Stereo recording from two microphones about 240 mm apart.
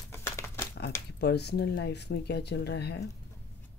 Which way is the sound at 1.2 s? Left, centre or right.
Left.